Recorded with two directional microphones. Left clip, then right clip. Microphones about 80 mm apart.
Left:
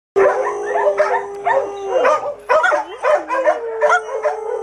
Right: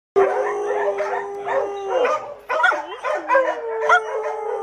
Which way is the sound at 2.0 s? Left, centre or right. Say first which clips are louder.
Left 7 dB; left.